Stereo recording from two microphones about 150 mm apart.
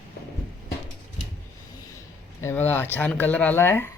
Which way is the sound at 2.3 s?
15° left (ahead or behind).